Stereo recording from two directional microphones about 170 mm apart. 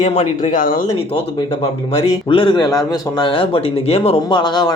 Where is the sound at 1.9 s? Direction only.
30° left (ahead or behind).